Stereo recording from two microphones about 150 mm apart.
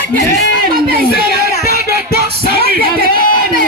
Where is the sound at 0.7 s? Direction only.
80° right.